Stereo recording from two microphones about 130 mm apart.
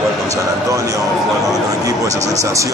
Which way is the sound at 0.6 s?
25° right (ahead or behind).